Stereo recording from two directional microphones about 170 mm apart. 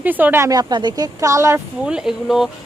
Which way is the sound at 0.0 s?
10° right (ahead or behind).